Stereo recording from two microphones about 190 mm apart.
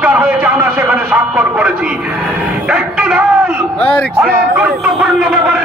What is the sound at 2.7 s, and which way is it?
A man's voice, 5° right (ahead or behind).